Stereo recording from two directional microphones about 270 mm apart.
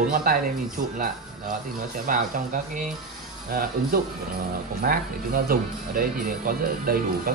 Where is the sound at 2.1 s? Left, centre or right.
Right.